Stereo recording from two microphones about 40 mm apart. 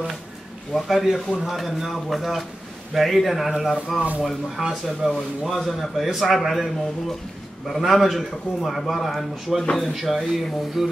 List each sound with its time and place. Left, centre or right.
0.7 s a man's voice: centre